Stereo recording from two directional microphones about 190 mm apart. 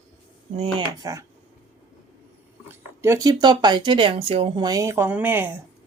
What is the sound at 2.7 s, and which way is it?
Speech, 15° right (ahead or behind).